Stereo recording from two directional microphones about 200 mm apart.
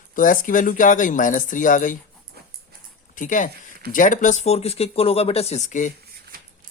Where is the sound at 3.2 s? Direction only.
40° left (ahead or behind).